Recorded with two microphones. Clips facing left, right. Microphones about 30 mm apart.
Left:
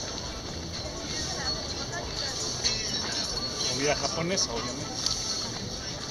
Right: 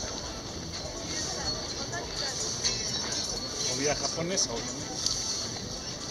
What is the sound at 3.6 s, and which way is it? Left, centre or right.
Speech, left.